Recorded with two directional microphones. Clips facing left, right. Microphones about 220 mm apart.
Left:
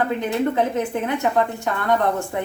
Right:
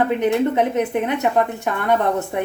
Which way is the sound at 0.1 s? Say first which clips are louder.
Right 4 dB; 20° right (ahead or behind).